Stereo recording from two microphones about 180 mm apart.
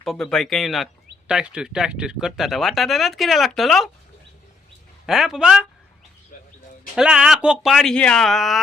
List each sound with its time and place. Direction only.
0.0 s speech: centre (ahead or behind)
5.0 s speech: centre (ahead or behind)
6.3 s a sound: 50° left (ahead or behind)
6.9 s speech: 5° right (ahead or behind)